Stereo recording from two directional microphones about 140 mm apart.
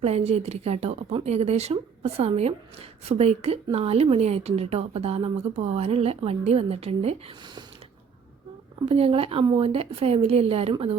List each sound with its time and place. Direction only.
0.0 s speech: 50° right (ahead or behind)
8.9 s speech: 45° right (ahead or behind)